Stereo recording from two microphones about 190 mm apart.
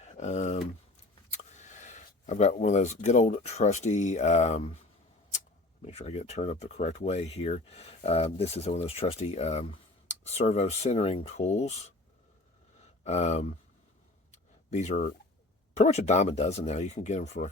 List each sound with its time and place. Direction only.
0.0 s a sound: 35° left (ahead or behind)
1.3 s speech: 40° left (ahead or behind)
5.8 s speech: 35° left (ahead or behind)
13.1 s speech: 35° left (ahead or behind)
14.7 s speech: 40° left (ahead or behind)